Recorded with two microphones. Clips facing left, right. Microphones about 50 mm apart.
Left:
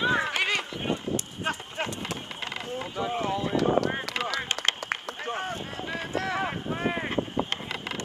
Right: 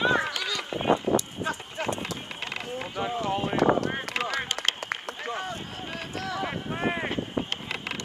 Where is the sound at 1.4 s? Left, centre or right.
Left.